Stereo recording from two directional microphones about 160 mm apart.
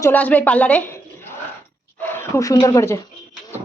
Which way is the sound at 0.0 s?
10° left (ahead or behind).